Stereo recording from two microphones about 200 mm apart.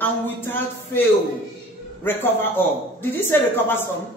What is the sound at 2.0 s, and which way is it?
A man's voice, 10° left (ahead or behind).